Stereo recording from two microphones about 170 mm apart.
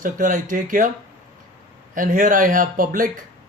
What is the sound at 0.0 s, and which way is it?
Speech, 50° right (ahead or behind).